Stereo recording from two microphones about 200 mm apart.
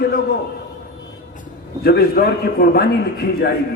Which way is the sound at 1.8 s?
50° left (ahead or behind).